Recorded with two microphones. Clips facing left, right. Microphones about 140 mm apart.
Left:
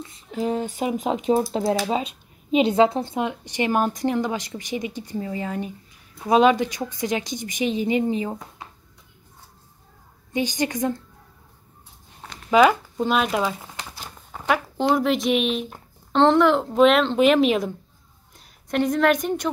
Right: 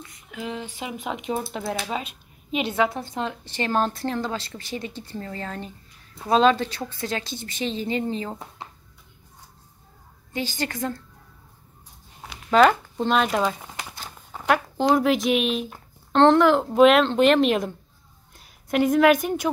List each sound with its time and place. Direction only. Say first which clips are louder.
0.0 s speech: left 8 dB; 30° left (ahead or behind); by 8.4 s 15° left (ahead or behind)
10.3 s speech: left 5 dB; 15° left (ahead or behind)
12.4 s speech: left 1 dB; 5° left (ahead or behind)
13.9 s a sound: even; 5° left (ahead or behind)
14.5 s speech: right 1 dB; centre (ahead or behind)